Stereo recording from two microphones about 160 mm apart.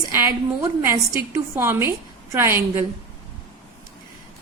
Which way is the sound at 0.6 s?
20° right (ahead or behind).